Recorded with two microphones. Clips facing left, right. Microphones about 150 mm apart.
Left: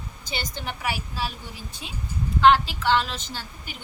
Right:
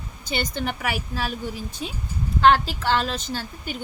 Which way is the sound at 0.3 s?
55° right (ahead or behind).